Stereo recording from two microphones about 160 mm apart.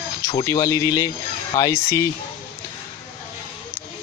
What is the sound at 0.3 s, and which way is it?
Speech, 20° left (ahead or behind).